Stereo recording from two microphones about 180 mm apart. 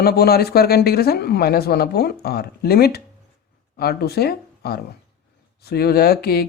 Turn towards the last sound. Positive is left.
turn(degrees=60)  # may be behind; listen again after turning